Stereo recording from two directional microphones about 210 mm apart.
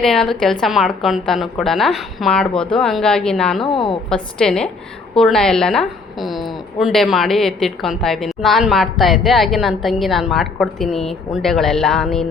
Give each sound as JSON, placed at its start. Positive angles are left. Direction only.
{"t": 0.0, "sound": "a woman's voice", "side_deg": 0}
{"t": 3.7, "sound": "a woman's voice", "side_deg": 20}
{"t": 4.1, "sound": "a woman's voice", "side_deg": 5}